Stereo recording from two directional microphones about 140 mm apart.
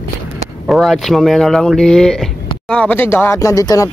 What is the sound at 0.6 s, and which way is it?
Speech, 5° right (ahead or behind).